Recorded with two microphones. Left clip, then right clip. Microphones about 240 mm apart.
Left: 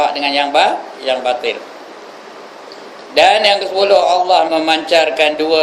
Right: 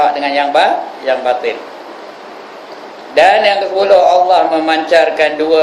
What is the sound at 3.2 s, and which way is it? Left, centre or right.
Speech, left.